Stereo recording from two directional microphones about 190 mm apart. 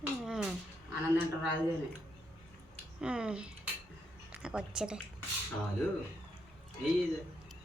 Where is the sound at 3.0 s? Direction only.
5° right (ahead or behind).